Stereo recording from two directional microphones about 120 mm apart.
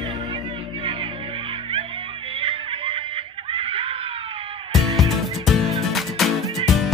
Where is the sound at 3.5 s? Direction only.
50° right (ahead or behind).